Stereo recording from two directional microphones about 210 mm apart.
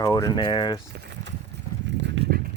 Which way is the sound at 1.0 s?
55° right (ahead or behind).